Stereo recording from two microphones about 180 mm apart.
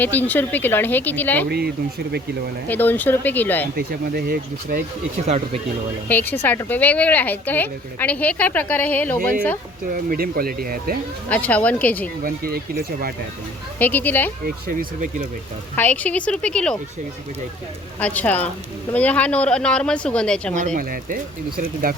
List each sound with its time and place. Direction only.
0.0 s a woman's voice: 10° left (ahead or behind)
1.5 s speech: 60° right (ahead or behind)
2.6 s a woman's voice: 10° left (ahead or behind)
3.8 s speech: 55° right (ahead or behind)
6.1 s a woman's voice: 10° left (ahead or behind)
9.9 s speech: 55° right (ahead or behind)
11.3 s a woman's voice: 10° left (ahead or behind)
12.2 s speech: 55° right (ahead or behind)
13.7 s a woman's voice: 10° left (ahead or behind)
14.4 s speech: 50° right (ahead or behind)
15.7 s a woman's voice: 10° left (ahead or behind)
18.0 s a woman's voice: 10° left (ahead or behind)
20.6 s speech: 45° right (ahead or behind)